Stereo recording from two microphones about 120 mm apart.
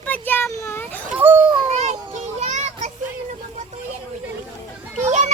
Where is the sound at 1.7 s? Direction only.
70° right (ahead or behind).